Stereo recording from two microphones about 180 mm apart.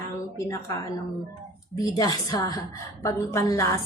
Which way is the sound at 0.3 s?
15° left (ahead or behind).